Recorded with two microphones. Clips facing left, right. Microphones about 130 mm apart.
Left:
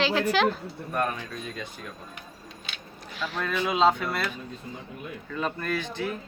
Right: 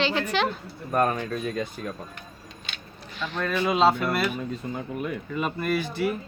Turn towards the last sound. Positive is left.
turn(degrees=-10)  # may be behind; listen again after turning